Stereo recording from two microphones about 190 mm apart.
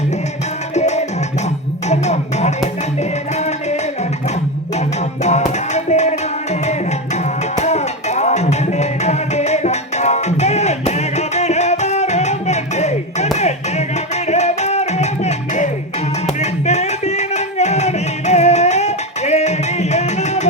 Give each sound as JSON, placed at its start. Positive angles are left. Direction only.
{"t": 0.7, "sound": "music", "side_deg": 35}
{"t": 5.2, "sound": "music", "side_deg": 35}
{"t": 13.3, "sound": "clapping", "side_deg": 35}
{"t": 14.3, "sound": "music", "side_deg": 35}
{"t": 16.4, "sound": "a sound", "side_deg": 35}